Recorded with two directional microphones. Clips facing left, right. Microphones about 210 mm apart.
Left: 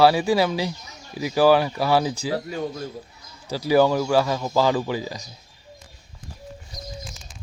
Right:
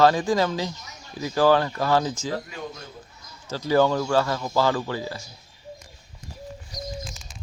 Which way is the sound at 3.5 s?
10° left (ahead or behind).